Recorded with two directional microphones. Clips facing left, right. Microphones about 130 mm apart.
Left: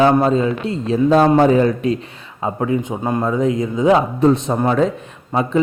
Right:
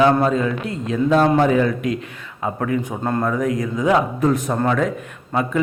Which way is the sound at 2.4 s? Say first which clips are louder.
Left 2 dB; 20° left (ahead or behind).